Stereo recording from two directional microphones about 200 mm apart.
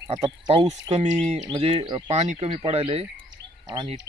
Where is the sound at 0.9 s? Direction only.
35° right (ahead or behind).